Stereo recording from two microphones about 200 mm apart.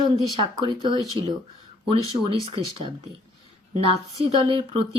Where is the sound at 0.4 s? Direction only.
25° right (ahead or behind).